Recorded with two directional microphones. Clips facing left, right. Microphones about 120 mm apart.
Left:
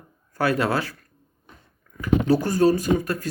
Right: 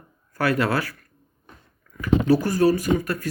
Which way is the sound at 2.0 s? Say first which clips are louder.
Right 1 dB; 25° left (ahead or behind).